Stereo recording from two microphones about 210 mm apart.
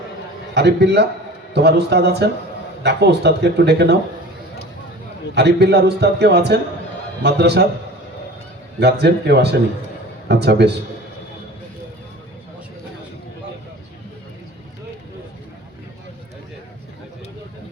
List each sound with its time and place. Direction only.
0.5 s a man's voice: 55° right (ahead or behind)
5.3 s a man's voice: 55° right (ahead or behind)
8.8 s a man's voice: 50° right (ahead or behind)